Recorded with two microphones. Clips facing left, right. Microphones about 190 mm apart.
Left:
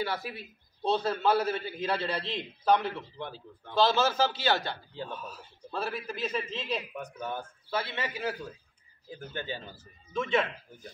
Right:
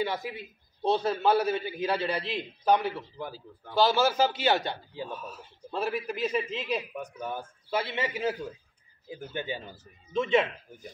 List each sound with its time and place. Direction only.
0.0 s a man's voice: 20° right (ahead or behind); by 5.4 s 5° right (ahead or behind)
5.7 s a man's voice: 15° right (ahead or behind)